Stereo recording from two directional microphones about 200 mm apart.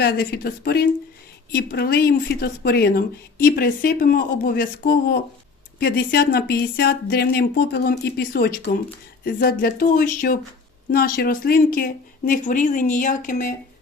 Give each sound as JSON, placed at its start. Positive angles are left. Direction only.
{"t": 0.0, "sound": "speech", "side_deg": 50}